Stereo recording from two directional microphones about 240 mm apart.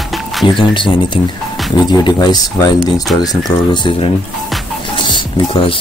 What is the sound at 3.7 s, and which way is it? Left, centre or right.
Speech, centre.